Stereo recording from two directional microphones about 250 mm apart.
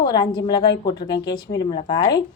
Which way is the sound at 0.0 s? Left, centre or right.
Centre.